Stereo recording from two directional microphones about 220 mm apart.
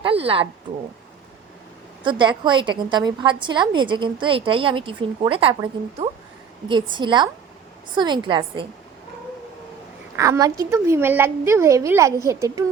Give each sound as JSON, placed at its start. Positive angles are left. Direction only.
{"t": 0.0, "sound": "a woman's voice", "side_deg": -25}
{"t": 2.0, "sound": "a woman's voice", "side_deg": -20}
{"t": 10.2, "sound": "a woman's voice", "side_deg": -15}